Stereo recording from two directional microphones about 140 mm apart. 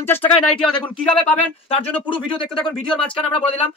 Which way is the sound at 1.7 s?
35° left (ahead or behind).